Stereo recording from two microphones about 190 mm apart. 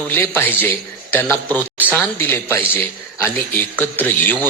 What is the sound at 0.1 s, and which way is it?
A man's voice, 10° left (ahead or behind).